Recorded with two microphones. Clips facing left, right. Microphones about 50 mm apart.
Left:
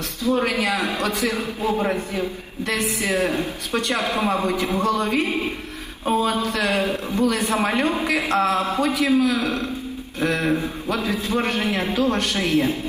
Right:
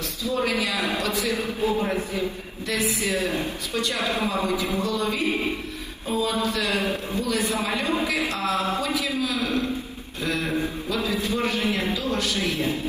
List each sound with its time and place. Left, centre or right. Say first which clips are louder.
0.2 s a man's voice: left 4 dB; left